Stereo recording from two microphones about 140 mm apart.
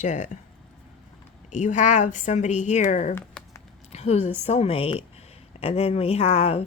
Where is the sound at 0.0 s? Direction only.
60° left (ahead or behind).